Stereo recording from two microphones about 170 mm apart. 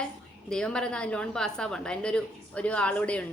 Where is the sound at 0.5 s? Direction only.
5° left (ahead or behind).